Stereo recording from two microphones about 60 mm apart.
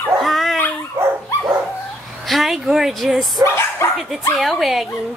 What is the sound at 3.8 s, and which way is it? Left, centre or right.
Speech, left.